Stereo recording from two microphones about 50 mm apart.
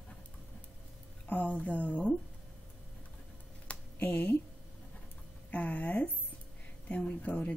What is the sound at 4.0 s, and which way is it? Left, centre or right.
Speech, left.